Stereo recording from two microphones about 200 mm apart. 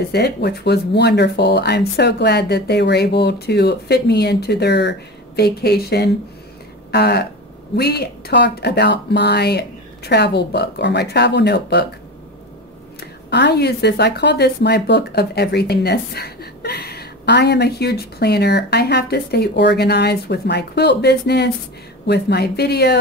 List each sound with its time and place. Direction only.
0.1 s speech: 55° left (ahead or behind)
6.9 s a sound: 55° left (ahead or behind)
7.7 s speech: 55° left (ahead or behind)
13.0 s speech: 55° left (ahead or behind)